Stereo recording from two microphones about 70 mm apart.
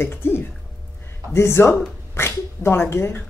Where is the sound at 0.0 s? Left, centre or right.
Left.